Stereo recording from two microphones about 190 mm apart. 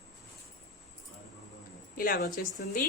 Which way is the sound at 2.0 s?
45° left (ahead or behind).